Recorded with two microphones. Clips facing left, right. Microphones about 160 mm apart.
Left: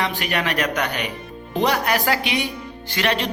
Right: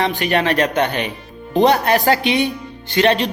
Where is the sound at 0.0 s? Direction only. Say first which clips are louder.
Right 6 dB; 25° right (ahead or behind).